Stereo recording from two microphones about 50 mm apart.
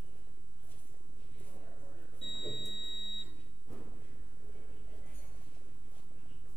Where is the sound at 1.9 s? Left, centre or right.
Centre.